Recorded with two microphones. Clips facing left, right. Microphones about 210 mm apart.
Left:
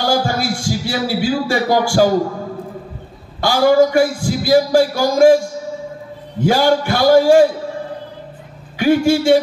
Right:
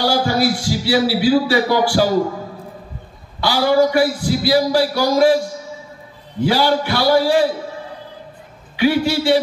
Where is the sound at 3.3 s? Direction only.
45° left (ahead or behind).